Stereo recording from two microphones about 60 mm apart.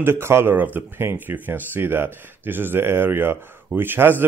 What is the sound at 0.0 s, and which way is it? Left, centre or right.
Speech, right.